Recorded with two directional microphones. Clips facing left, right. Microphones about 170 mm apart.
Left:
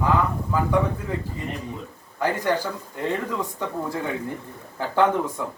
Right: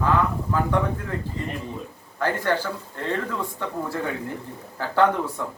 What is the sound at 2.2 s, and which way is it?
Speech, 15° left (ahead or behind).